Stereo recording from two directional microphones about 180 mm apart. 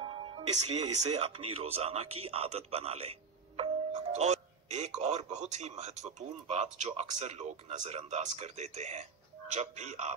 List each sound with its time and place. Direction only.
0.0 s speech: 30° right (ahead or behind)